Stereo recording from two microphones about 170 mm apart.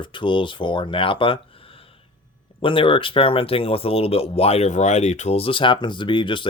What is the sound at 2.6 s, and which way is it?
Speech, 30° left (ahead or behind).